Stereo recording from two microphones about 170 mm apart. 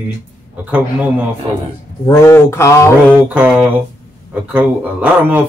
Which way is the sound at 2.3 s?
15° left (ahead or behind).